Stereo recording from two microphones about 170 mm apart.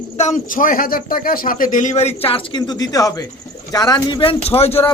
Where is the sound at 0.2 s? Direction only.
50° left (ahead or behind).